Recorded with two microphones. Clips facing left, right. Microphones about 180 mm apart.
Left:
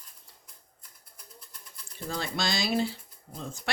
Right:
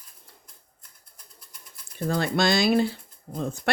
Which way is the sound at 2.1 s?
60° right (ahead or behind).